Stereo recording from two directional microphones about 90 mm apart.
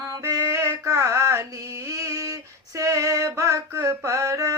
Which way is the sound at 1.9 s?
35° right (ahead or behind).